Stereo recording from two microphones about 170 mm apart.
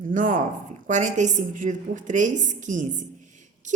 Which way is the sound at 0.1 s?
50° right (ahead or behind).